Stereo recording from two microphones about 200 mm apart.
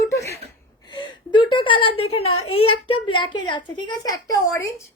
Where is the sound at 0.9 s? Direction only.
25° left (ahead or behind).